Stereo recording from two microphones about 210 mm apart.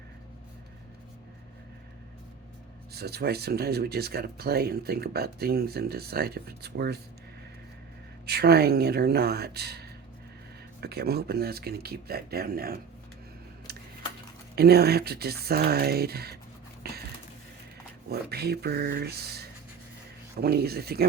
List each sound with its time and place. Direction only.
2.9 s speech: 50° right (ahead or behind)
8.3 s speech: 50° right (ahead or behind)
13.7 s a sound: 50° right (ahead or behind)
14.5 s speech: 50° right (ahead or behind)
16.8 s a sound: 50° right (ahead or behind)
18.1 s speech: 50° right (ahead or behind)